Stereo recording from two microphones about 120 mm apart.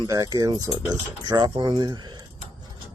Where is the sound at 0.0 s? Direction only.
30° right (ahead or behind).